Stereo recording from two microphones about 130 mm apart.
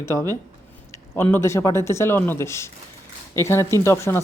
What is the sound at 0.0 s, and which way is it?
A man's voice, 20° left (ahead or behind).